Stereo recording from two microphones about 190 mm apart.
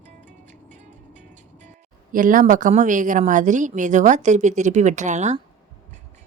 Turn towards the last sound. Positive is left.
turn(degrees=-40)  # may be behind; listen again after turning